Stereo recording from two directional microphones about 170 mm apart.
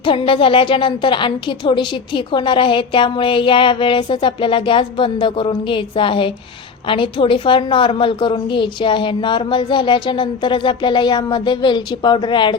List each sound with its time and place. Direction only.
0.0 s a woman's voice: 30° left (ahead or behind)